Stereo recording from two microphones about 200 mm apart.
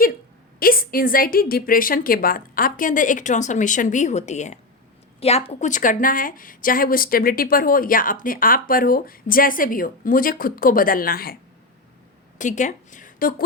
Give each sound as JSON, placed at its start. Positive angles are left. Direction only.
{"t": 0.6, "sound": "a woman's voice", "side_deg": 45}
{"t": 12.4, "sound": "speech", "side_deg": 40}